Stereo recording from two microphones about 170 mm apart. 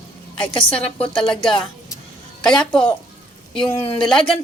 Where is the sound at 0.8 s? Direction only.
5° left (ahead or behind).